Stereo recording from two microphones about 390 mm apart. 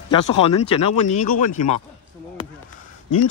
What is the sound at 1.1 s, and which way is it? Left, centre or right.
Speech, centre.